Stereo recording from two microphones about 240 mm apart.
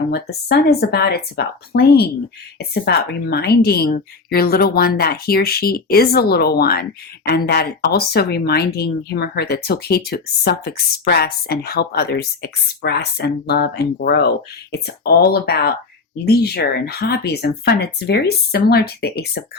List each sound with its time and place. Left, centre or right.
0.1 s speech: left